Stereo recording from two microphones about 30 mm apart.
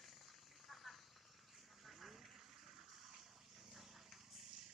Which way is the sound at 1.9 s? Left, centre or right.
Centre.